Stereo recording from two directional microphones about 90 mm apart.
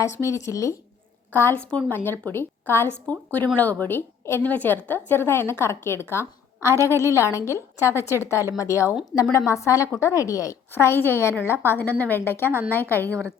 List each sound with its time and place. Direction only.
0.0 s speech: 35° left (ahead or behind)
1.3 s a woman's voice: 25° left (ahead or behind)
9.1 s speech: 5° left (ahead or behind)
9.5 s a woman's voice: 35° left (ahead or behind)